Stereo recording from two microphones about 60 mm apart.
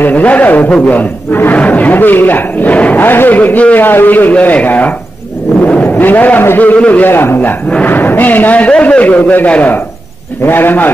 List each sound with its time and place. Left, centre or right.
0.0 s a man's voice: left
5.6 s vehicle: left
5.9 s a man's voice: left